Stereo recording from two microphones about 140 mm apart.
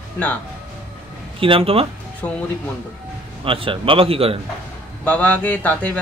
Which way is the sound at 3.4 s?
40° right (ahead or behind).